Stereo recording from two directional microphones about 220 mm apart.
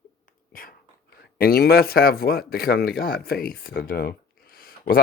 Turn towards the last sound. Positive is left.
turn(degrees=40)  # may be behind; listen again after turning